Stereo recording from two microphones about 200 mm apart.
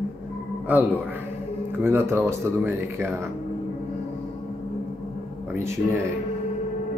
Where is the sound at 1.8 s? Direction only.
10° right (ahead or behind).